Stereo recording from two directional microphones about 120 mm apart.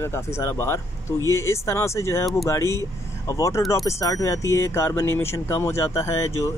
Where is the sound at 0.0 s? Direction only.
20° left (ahead or behind).